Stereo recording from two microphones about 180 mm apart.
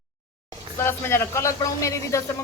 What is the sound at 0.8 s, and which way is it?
A woman's voice, 15° left (ahead or behind).